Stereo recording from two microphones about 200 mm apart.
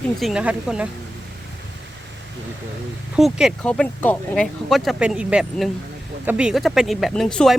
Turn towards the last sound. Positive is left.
turn(degrees=0)  # may be behind; listen again after turning